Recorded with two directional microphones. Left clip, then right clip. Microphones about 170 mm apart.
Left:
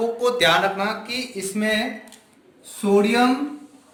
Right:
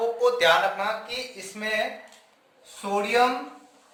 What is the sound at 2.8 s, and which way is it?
Speech, 5° right (ahead or behind).